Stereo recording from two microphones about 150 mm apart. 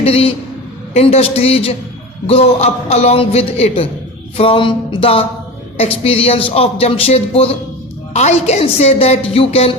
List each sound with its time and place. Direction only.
0.0 s a woman's voice: 40° left (ahead or behind)